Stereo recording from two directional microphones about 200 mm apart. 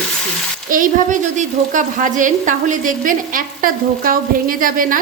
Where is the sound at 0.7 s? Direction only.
40° right (ahead or behind).